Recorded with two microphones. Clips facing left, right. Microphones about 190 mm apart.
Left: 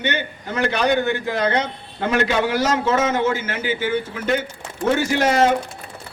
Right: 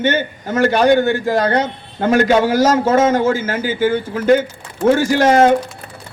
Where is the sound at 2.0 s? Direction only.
45° right (ahead or behind).